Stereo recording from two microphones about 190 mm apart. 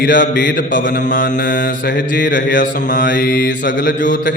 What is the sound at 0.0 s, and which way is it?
Mantra, 45° left (ahead or behind).